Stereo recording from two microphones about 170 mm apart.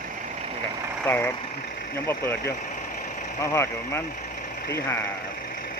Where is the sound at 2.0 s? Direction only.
15° left (ahead or behind).